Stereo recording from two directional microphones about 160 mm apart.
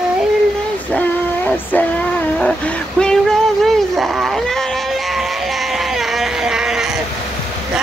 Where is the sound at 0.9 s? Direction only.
10° left (ahead or behind).